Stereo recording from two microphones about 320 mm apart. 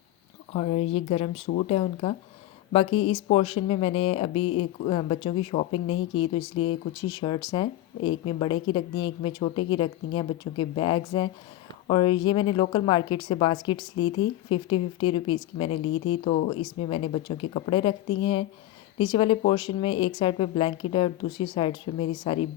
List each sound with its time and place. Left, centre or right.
0.5 s speech: centre